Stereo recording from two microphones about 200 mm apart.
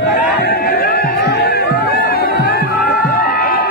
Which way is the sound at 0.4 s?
55° left (ahead or behind).